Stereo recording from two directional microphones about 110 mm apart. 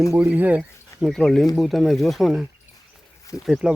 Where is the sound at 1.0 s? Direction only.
5° left (ahead or behind).